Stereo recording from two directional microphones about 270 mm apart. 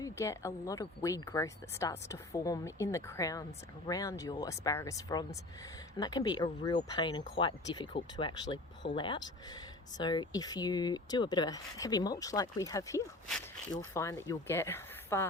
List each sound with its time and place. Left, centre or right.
0.0 s speech: centre